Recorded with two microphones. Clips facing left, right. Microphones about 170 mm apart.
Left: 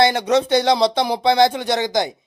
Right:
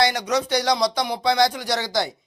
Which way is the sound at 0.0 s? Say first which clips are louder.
Left 5 dB; 25° left (ahead or behind).